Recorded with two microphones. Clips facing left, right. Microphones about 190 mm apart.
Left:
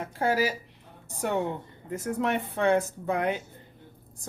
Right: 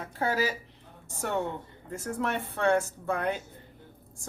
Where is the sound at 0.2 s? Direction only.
10° left (ahead or behind).